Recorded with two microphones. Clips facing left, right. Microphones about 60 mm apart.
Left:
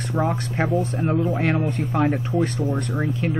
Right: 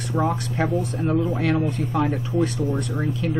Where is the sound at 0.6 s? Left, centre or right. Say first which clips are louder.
Left 3 dB; left.